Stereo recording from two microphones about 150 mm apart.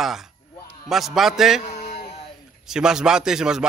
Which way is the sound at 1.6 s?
55° left (ahead or behind).